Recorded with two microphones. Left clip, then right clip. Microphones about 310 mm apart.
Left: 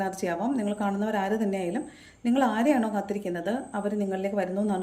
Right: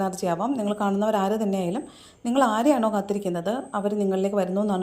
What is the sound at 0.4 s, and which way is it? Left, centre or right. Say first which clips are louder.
A woman's voice: right 3 dB; centre.